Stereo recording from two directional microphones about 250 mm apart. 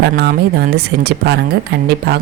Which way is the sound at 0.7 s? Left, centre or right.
Right.